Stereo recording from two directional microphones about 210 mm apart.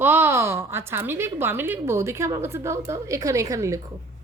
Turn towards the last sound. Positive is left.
turn(degrees=-15)  # may be behind; listen again after turning